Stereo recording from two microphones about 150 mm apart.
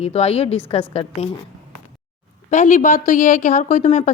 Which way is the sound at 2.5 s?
55° left (ahead or behind).